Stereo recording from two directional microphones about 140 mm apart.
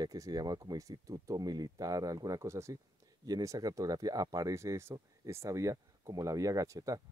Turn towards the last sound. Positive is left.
turn(degrees=-25)  # may be behind; listen again after turning